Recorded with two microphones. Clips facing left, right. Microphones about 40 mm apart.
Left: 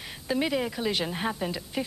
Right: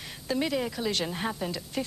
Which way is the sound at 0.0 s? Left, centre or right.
Centre.